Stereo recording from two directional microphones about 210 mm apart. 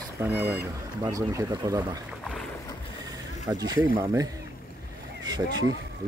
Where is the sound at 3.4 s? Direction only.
15° right (ahead or behind).